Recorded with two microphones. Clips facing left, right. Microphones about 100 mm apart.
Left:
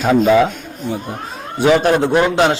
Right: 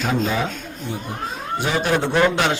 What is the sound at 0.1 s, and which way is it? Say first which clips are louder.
Speech: left 12 dB; 90° left.